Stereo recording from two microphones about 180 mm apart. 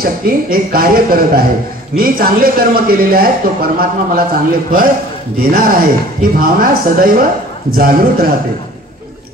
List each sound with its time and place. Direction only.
0.0 s speech: 55° right (ahead or behind)